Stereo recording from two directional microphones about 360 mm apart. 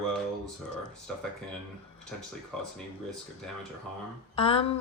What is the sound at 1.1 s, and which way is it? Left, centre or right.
Speech, centre.